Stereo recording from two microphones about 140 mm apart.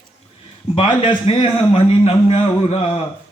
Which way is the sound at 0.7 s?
35° left (ahead or behind).